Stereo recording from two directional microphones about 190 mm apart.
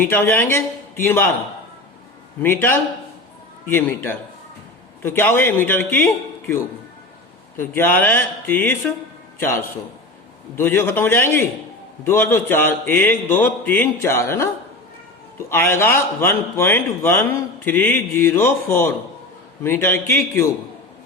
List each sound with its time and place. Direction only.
0.0 s a man's voice: 10° left (ahead or behind)
2.4 s a man's voice: 10° left (ahead or behind)
7.6 s a man's voice: 10° left (ahead or behind)